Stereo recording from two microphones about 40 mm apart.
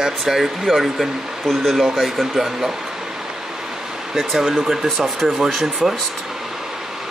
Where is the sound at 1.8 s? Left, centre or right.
Centre.